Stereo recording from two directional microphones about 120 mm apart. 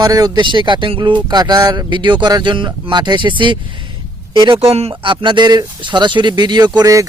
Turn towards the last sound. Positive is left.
turn(degrees=-30)  # may be behind; listen again after turning